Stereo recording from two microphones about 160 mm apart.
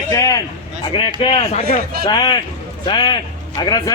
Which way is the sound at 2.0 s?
25° left (ahead or behind).